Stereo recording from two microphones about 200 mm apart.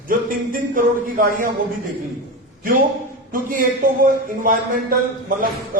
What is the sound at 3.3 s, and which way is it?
A man's voice, 45° right (ahead or behind).